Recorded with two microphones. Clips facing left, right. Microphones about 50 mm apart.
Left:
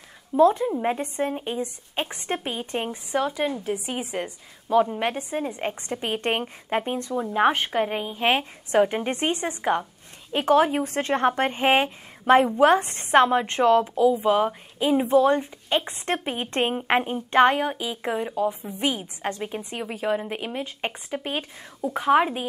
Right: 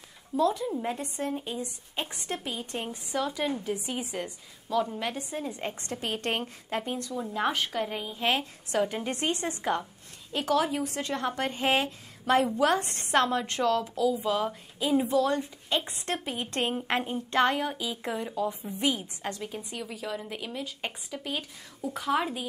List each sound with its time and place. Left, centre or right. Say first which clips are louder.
0.4 s a woman's voice: left 8 dB; left